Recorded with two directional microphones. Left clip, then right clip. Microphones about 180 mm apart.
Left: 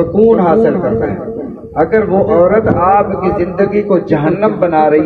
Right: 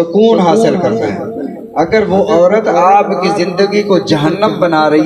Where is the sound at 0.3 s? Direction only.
45° right (ahead or behind).